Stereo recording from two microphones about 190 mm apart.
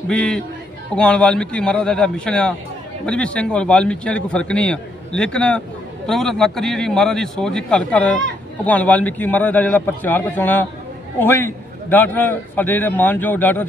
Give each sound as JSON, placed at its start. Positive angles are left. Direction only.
{"t": 0.1, "sound": "a man's voice", "side_deg": 5}